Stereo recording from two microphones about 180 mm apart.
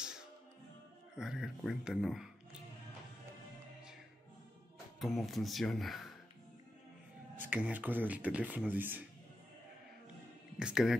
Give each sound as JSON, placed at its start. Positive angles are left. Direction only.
{"t": 1.1, "sound": "speech", "side_deg": -5}
{"t": 5.0, "sound": "speech", "side_deg": 0}
{"t": 7.3, "sound": "speech", "side_deg": -10}
{"t": 10.6, "sound": "speech", "side_deg": -5}